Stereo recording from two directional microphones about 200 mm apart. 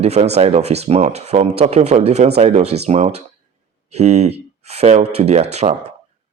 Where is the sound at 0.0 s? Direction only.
30° right (ahead or behind).